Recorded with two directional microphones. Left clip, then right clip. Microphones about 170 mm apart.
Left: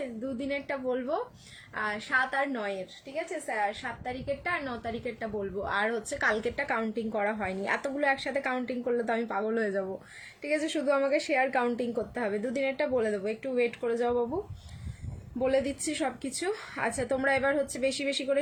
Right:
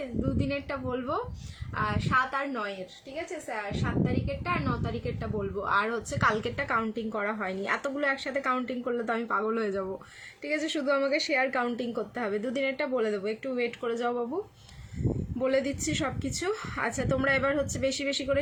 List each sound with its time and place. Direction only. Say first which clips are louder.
0.0 s a woman's voice: right 3 dB; 20° right (ahead or behind)
15.4 s a woman's voice: even; 15° right (ahead or behind)